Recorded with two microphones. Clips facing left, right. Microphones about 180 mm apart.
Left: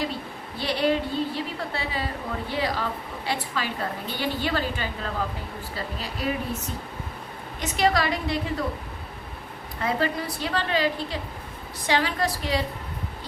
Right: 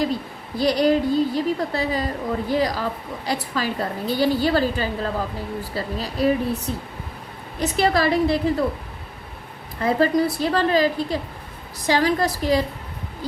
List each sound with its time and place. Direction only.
0.6 s a woman's voice: 40° right (ahead or behind)
9.8 s a woman's voice: 40° right (ahead or behind)